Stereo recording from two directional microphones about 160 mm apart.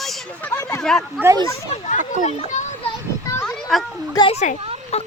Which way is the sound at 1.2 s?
20° right (ahead or behind).